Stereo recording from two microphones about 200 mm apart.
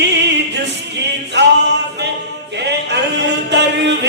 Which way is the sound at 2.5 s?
60° right (ahead or behind).